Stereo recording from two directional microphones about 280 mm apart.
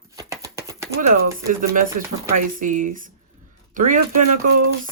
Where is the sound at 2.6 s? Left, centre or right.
Right.